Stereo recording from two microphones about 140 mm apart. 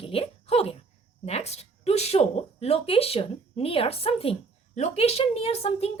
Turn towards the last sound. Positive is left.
turn(degrees=45)  # may be behind; listen again after turning